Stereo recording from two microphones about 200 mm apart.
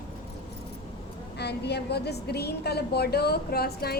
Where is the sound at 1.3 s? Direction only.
55° left (ahead or behind).